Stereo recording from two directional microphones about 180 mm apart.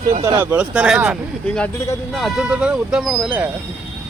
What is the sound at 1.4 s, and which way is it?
Speech, 10° left (ahead or behind).